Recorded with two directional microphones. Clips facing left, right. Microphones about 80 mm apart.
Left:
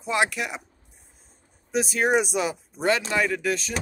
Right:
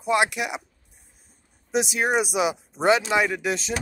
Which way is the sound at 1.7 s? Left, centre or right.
Centre.